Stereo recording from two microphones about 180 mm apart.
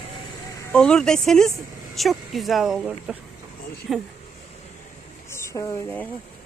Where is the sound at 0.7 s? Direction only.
5° left (ahead or behind).